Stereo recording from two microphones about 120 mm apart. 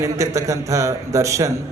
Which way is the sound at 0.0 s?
25° right (ahead or behind).